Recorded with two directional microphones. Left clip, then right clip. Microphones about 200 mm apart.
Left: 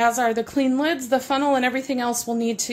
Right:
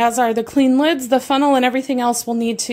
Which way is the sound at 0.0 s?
35° right (ahead or behind).